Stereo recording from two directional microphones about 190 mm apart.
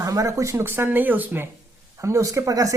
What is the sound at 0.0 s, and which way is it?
Speech, 15° right (ahead or behind).